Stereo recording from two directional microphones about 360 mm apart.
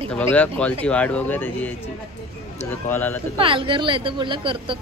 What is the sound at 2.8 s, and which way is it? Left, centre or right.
Speech, centre.